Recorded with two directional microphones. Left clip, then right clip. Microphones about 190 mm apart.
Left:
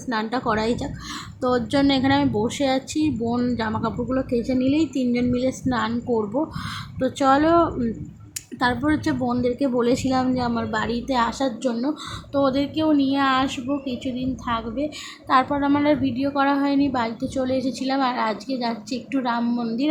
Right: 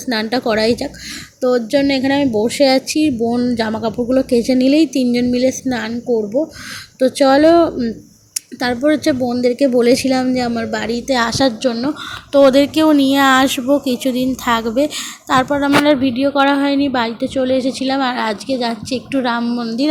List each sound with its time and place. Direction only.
0.1 s a woman's voice: 10° right (ahead or behind)
7.0 s a woman's voice: 10° right (ahead or behind)